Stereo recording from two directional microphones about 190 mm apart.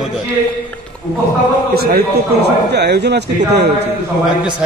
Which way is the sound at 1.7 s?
55° right (ahead or behind).